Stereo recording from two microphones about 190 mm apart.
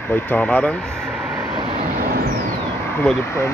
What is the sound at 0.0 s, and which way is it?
Vehicle, 10° left (ahead or behind).